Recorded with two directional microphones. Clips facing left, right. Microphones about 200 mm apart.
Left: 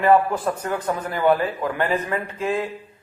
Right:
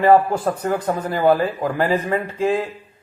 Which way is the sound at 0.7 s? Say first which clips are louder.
Right 4 dB; 40° right (ahead or behind).